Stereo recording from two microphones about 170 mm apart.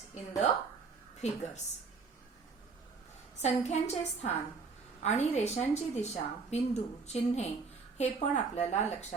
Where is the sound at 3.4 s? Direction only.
40° left (ahead or behind).